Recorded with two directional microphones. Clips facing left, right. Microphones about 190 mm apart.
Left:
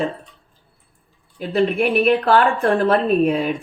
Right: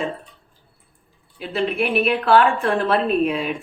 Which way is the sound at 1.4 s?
35° left (ahead or behind).